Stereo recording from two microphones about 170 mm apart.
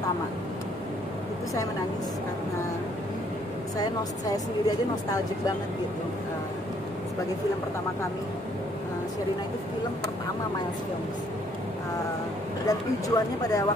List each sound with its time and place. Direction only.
3.7 s a woman's voice: 20° left (ahead or behind)
12.6 s a woman's voice: 20° left (ahead or behind)